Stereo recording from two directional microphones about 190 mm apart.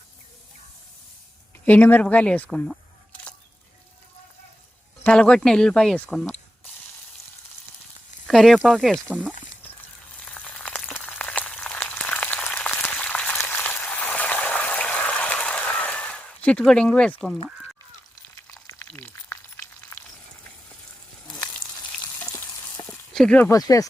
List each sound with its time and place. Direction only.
1.6 s speech: 10° left (ahead or behind)
5.0 s speech: 5° left (ahead or behind)
8.3 s speech: centre (ahead or behind)
10.2 s a sound: 5° left (ahead or behind)
18.3 s frying: 15° left (ahead or behind)
22.2 s a sound: 15° left (ahead or behind)
23.1 s speech: 5° left (ahead or behind)
23.5 s speech: 20° left (ahead or behind)